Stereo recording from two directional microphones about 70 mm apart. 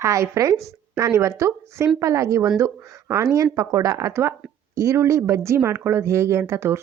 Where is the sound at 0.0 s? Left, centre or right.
Right.